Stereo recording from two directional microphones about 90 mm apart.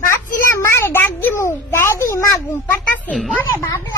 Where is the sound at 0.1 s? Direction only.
30° left (ahead or behind).